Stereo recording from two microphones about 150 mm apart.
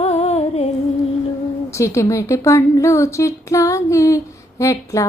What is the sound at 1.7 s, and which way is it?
A woman's voice, 20° left (ahead or behind).